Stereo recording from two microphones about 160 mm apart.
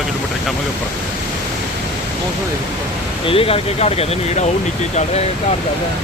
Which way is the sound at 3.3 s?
35° left (ahead or behind).